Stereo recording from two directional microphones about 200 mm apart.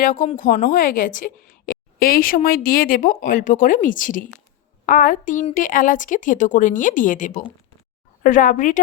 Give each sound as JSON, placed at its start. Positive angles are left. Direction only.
{"t": 0.0, "sound": "a woman's voice", "side_deg": 40}